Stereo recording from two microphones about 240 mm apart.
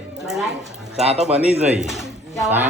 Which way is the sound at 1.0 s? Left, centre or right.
Right.